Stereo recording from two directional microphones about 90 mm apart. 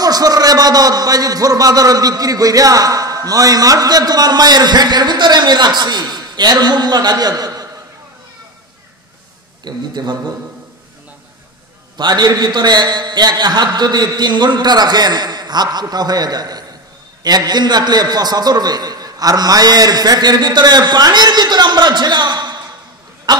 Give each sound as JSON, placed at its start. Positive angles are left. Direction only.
{"t": 0.0, "sound": "a man's voice", "side_deg": -45}
{"t": 9.7, "sound": "a man's voice", "side_deg": -50}
{"t": 12.0, "sound": "a man's voice", "side_deg": -50}